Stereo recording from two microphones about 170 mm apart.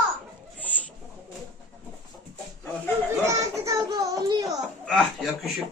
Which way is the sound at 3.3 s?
20° right (ahead or behind).